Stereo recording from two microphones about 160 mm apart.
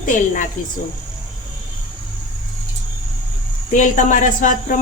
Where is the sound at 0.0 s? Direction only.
55° left (ahead or behind).